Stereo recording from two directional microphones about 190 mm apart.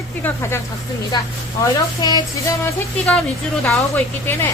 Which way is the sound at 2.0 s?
20° left (ahead or behind).